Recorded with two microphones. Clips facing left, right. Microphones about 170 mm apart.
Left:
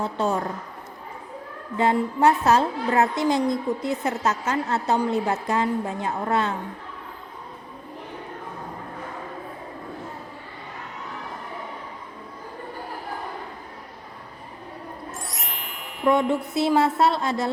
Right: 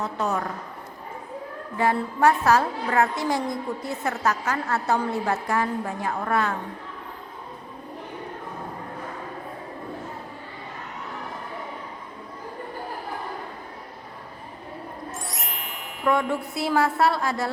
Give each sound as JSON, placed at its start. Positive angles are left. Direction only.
{"t": 0.0, "sound": "a woman's voice", "side_deg": 30}
{"t": 1.8, "sound": "a woman's voice", "side_deg": 20}
{"t": 15.3, "sound": "music", "side_deg": 0}
{"t": 16.0, "sound": "a woman's voice", "side_deg": 20}